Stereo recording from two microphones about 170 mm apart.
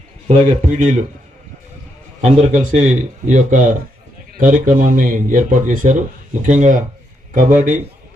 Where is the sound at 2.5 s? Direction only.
45° right (ahead or behind).